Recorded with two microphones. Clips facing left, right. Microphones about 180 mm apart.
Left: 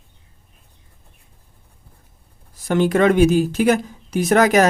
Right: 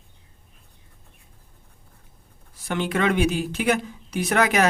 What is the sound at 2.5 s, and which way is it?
Speech, 40° left (ahead or behind).